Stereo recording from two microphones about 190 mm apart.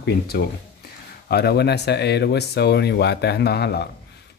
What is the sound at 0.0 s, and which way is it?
Speech, 55° left (ahead or behind).